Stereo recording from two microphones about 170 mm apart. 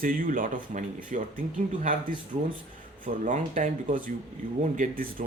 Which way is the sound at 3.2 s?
45° right (ahead or behind).